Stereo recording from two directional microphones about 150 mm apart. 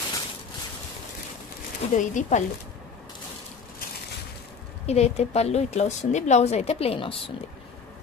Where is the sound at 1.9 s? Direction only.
55° left (ahead or behind).